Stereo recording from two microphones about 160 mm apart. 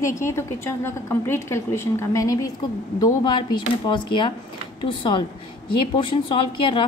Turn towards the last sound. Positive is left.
turn(degrees=30)  # may be behind; listen again after turning